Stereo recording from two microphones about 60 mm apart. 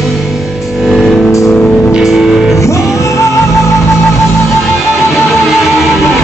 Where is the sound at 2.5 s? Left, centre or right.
Left.